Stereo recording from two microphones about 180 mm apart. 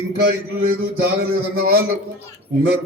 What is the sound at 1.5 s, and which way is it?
Speech, 60° right (ahead or behind).